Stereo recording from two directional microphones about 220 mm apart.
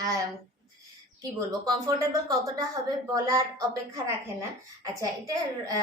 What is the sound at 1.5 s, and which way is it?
A woman's voice, 15° right (ahead or behind).